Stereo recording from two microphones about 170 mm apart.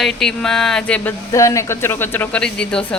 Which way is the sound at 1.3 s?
20° left (ahead or behind).